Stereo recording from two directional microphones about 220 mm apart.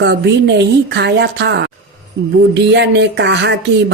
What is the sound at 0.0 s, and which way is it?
A woman's voice, 50° right (ahead or behind).